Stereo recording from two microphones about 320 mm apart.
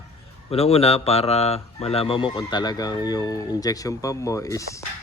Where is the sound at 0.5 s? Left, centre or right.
Centre.